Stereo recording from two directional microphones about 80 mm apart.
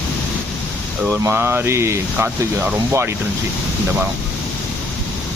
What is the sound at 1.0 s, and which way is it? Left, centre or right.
Speech, right.